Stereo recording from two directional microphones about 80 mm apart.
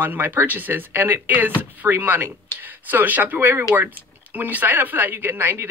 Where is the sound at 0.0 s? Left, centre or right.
Right.